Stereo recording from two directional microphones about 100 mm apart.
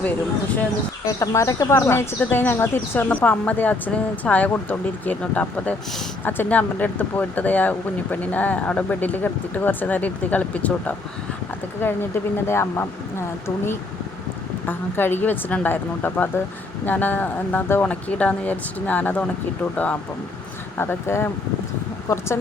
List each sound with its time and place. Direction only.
1.0 s speech: 30° left (ahead or behind)
1.9 s speech: 25° left (ahead or behind)
12.5 s speech: 25° left (ahead or behind)
14.7 s speech: 20° left (ahead or behind)
22.1 s speech: 35° left (ahead or behind)